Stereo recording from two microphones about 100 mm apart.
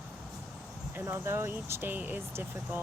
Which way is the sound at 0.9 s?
25° right (ahead or behind).